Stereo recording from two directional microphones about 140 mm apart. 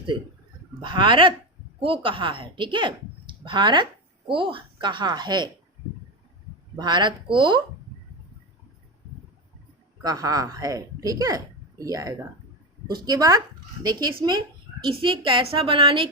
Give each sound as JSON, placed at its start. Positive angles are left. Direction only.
{"t": 0.8, "sound": "speech", "side_deg": -35}
{"t": 6.7, "sound": "speech", "side_deg": -30}
{"t": 10.0, "sound": "speech", "side_deg": -25}
{"t": 14.8, "sound": "speech", "side_deg": -35}